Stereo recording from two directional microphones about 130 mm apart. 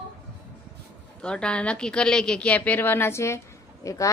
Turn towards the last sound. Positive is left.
turn(degrees=25)  # may be behind; listen again after turning